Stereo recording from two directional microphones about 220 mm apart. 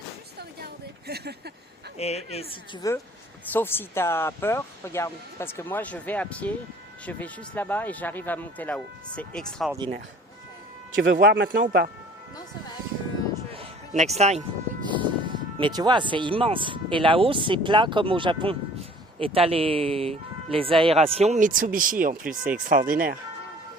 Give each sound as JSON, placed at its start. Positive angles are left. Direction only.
{"t": 0.3, "sound": "a sound", "side_deg": -45}
{"t": 2.0, "sound": "speech", "side_deg": 30}
{"t": 9.7, "sound": "speech", "side_deg": -20}
{"t": 11.1, "sound": "speech", "side_deg": -45}
{"t": 13.5, "sound": "speech", "side_deg": -30}